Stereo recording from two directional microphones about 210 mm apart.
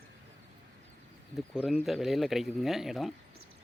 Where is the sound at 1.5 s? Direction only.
5° right (ahead or behind).